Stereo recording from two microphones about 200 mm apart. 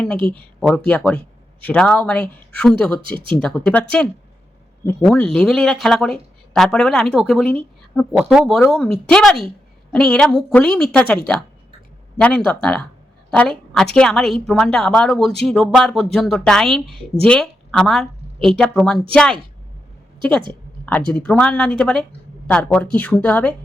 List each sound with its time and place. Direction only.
0.2 s a woman's voice: 25° right (ahead or behind)
0.9 s a woman's voice: 5° left (ahead or behind)
20.5 s a sound: 10° left (ahead or behind)
21.1 s speech: 5° left (ahead or behind)